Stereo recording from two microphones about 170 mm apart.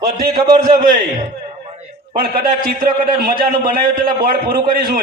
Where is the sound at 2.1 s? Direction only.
60° right (ahead or behind).